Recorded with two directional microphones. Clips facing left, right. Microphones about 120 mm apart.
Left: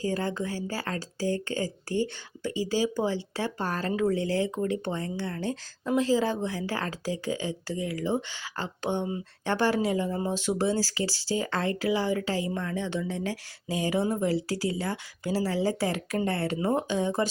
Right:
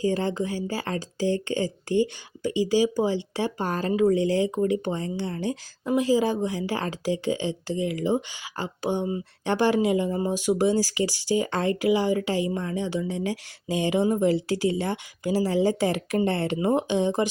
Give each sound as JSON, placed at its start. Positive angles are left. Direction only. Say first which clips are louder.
{"t": 0.0, "sound": "a woman's voice", "louder": "right 4 dB", "side_deg": -20}